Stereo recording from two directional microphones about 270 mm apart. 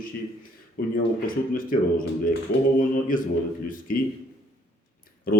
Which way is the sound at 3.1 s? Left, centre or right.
Left.